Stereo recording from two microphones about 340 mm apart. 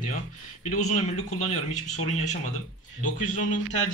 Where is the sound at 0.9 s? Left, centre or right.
Centre.